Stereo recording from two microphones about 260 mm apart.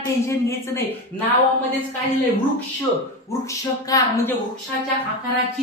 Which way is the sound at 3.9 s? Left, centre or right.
Centre.